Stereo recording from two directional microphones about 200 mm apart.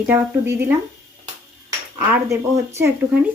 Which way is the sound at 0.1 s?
10° right (ahead or behind).